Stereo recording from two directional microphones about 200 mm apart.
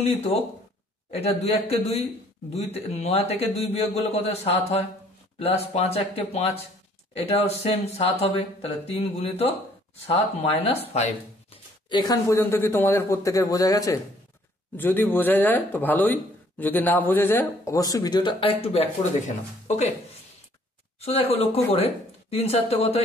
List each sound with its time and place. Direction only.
0.0 s speech: 30° left (ahead or behind)
21.0 s speech: 30° left (ahead or behind)